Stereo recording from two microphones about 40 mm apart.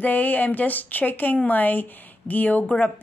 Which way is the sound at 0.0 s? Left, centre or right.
Left.